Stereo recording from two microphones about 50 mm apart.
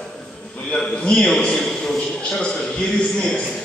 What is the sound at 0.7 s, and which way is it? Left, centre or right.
A man's voice, centre.